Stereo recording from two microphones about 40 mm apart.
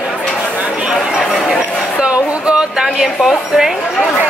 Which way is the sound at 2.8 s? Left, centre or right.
Centre.